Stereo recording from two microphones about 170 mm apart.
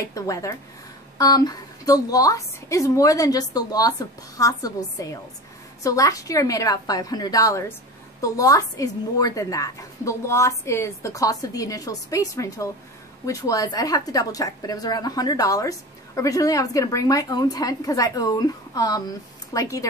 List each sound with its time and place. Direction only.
0.1 s a woman's voice: 20° left (ahead or behind)